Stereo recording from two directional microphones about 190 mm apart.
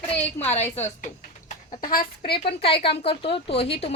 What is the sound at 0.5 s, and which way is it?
Speech, 35° left (ahead or behind).